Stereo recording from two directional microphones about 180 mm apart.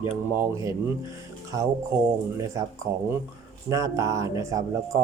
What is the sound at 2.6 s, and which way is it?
Speech, 20° right (ahead or behind).